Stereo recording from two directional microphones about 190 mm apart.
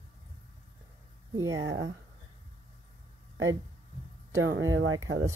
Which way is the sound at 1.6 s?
90° right.